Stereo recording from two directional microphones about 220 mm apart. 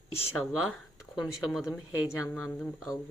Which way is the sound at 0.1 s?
25° left (ahead or behind).